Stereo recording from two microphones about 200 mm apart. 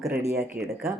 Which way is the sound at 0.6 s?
50° right (ahead or behind).